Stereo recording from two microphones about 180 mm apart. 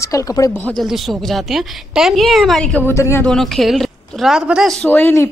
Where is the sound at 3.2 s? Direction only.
Centre (ahead or behind).